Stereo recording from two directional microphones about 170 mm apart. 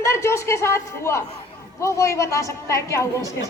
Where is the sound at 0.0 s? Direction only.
15° left (ahead or behind).